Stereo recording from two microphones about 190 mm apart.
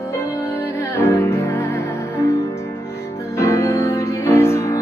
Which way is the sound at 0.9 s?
15° left (ahead or behind).